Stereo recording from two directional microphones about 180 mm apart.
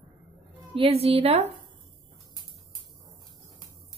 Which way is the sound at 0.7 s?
30° right (ahead or behind).